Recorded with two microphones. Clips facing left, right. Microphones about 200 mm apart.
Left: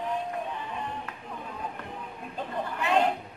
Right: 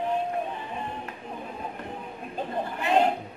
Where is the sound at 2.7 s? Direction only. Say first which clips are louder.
Right 2 dB; 30° right (ahead or behind).